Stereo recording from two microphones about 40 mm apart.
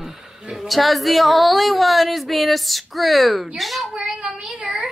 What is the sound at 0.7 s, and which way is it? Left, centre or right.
Speech, centre.